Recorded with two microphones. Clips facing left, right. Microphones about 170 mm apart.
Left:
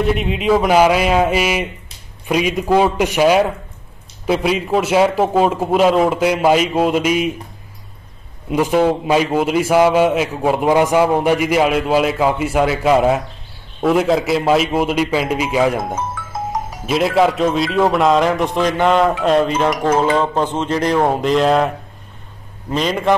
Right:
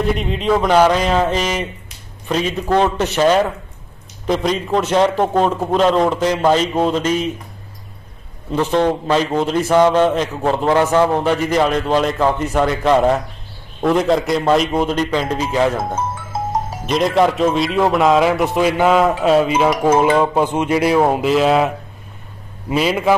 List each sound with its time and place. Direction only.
0.0 s a man's voice: 5° left (ahead or behind)
8.5 s a man's voice: 10° left (ahead or behind); by 23.1 s 5° right (ahead or behind)